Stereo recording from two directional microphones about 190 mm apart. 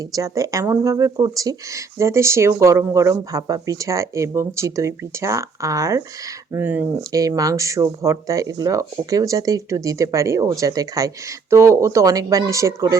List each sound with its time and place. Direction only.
0.1 s speech: 20° right (ahead or behind)